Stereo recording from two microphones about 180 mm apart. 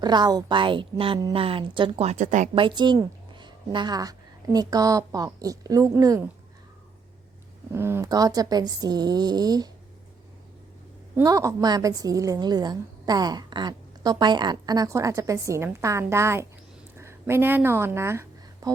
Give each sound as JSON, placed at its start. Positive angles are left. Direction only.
{"t": 0.0, "sound": "a woman's voice", "side_deg": -25}
{"t": 2.6, "sound": "a woman's voice", "side_deg": -25}
{"t": 7.7, "sound": "a woman's voice", "side_deg": -15}
{"t": 11.2, "sound": "a woman's voice", "side_deg": -20}
{"t": 17.0, "sound": "a sound", "side_deg": -15}